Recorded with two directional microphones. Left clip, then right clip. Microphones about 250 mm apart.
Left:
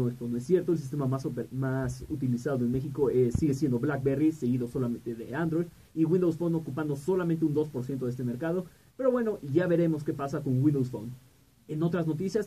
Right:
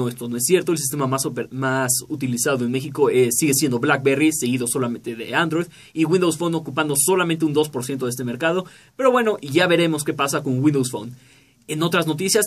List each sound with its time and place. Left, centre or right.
0.0 s speech: centre